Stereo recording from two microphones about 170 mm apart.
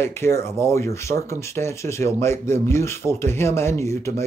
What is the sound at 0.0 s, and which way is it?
Speech, 15° left (ahead or behind).